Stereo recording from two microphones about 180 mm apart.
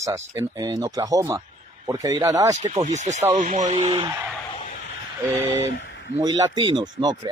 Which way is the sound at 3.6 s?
30° right (ahead or behind).